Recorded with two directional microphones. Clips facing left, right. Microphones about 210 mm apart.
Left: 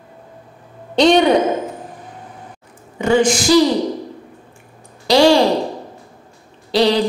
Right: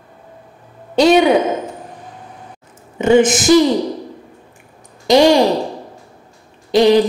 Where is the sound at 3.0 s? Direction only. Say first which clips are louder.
Right 3 dB; 20° right (ahead or behind).